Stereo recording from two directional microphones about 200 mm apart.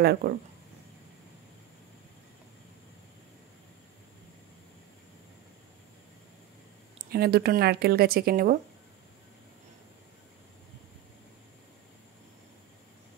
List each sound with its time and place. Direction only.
0.0 s a woman's voice: 50° right (ahead or behind)
7.1 s a woman's voice: 50° right (ahead or behind)